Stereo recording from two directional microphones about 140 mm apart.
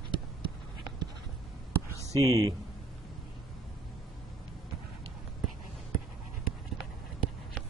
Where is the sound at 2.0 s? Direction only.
20° left (ahead or behind).